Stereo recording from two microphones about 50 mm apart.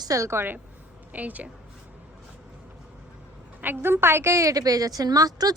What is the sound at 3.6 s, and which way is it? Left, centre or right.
Speech, right.